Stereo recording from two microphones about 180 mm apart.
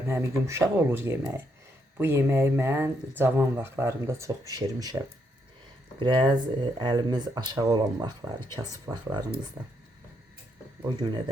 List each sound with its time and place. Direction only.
0.1 s speech: 15° right (ahead or behind)
6.0 s speech: 25° right (ahead or behind)